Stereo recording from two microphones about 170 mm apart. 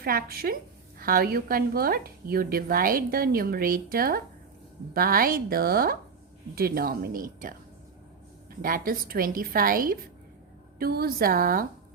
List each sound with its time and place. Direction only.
0.0 s speech: 60° right (ahead or behind)
8.6 s speech: 55° right (ahead or behind)